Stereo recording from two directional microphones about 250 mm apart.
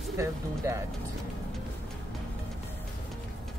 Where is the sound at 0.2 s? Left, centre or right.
Centre.